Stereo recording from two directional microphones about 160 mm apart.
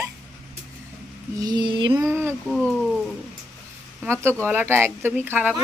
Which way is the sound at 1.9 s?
15° right (ahead or behind).